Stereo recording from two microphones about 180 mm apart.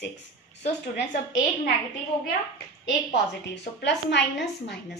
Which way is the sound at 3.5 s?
70° left (ahead or behind).